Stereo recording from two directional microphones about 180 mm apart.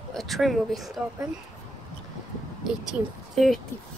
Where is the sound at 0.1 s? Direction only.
Centre (ahead or behind).